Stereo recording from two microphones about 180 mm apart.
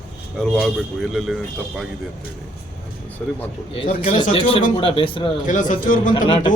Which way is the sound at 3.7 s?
30° left (ahead or behind).